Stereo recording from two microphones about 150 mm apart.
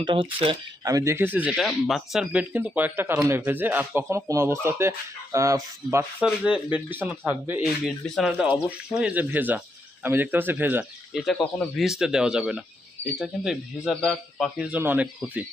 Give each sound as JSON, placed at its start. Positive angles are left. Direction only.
{"t": 0.0, "sound": "speech", "side_deg": -35}
{"t": 0.9, "sound": "speech", "side_deg": -20}
{"t": 1.5, "sound": "speech", "side_deg": 0}
{"t": 6.2, "sound": "speech", "side_deg": -5}
{"t": 7.6, "sound": "speech", "side_deg": 0}
{"t": 11.1, "sound": "speech", "side_deg": 0}